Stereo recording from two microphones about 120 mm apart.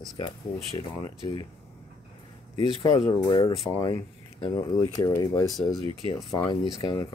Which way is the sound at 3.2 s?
45° left (ahead or behind).